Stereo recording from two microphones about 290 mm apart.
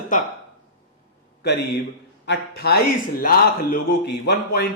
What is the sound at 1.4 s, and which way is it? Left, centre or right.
A man's voice, left.